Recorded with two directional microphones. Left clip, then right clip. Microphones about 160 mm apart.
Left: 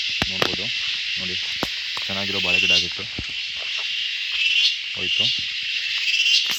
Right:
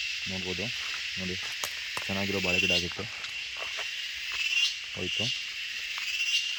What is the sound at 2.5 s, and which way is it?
Speech, 5° left (ahead or behind).